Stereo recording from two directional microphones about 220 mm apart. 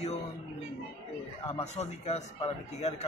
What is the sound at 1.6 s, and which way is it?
A man's voice, 30° left (ahead or behind).